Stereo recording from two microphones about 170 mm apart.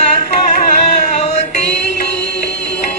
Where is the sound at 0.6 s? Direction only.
40° left (ahead or behind).